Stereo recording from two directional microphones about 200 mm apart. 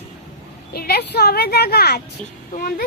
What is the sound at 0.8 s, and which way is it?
A woman's voice, 55° left (ahead or behind).